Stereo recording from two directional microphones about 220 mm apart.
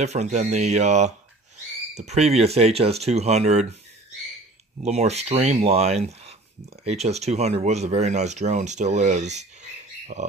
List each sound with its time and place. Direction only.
0.0 s speech: 30° right (ahead or behind)
4.8 s speech: 30° right (ahead or behind)